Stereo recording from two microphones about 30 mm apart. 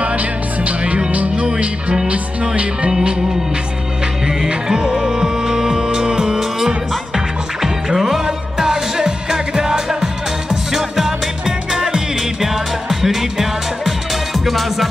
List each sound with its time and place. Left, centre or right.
0.0 s music: right
1.3 s music: right
2.9 s music: right
4.6 s music: centre
14.3 s music: centre